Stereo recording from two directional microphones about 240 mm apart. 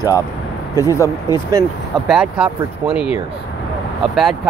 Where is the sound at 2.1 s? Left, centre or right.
Centre.